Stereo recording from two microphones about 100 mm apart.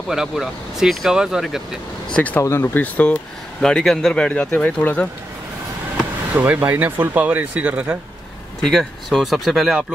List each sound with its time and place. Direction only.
0.1 s speech: 5° right (ahead or behind)
2.1 s speech: 15° left (ahead or behind)
6.3 s speech: 15° right (ahead or behind)
8.5 s speech: 5° left (ahead or behind)